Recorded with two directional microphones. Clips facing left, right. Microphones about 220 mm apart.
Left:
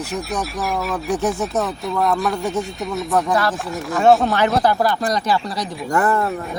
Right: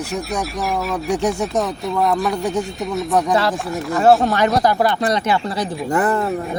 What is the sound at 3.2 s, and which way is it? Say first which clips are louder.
Speech: right 2 dB; 25° right (ahead or behind).